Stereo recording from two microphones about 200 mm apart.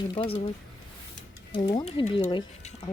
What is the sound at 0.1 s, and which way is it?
Speech, 25° left (ahead or behind).